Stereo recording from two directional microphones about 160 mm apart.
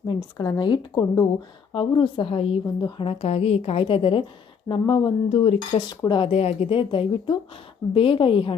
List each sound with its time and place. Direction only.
0.1 s a woman's voice: 25° left (ahead or behind)